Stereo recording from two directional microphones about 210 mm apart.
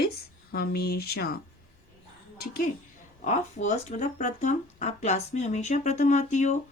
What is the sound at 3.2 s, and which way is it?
A woman's voice, 35° left (ahead or behind).